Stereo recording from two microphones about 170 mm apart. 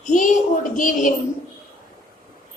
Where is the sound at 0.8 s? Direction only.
50° left (ahead or behind).